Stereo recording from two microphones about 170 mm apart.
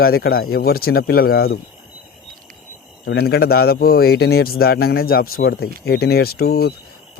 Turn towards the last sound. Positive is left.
turn(degrees=65)  # may be behind; listen again after turning